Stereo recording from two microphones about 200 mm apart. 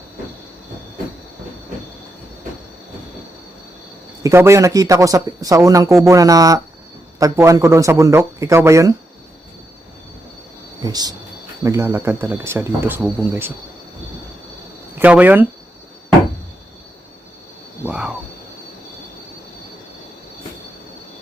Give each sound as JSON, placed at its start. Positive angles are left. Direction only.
{"t": 4.2, "sound": "a man's voice", "side_deg": -15}
{"t": 10.8, "sound": "a man's voice", "side_deg": -20}
{"t": 14.9, "sound": "a man's voice", "side_deg": -10}
{"t": 17.8, "sound": "speech", "side_deg": -5}